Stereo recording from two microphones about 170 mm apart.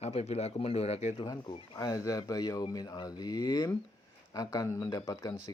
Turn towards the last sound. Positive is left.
turn(degrees=20)  # may be behind; listen again after turning